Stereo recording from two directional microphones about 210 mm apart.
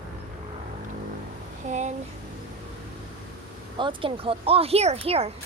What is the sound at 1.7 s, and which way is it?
Speech, 35° right (ahead or behind).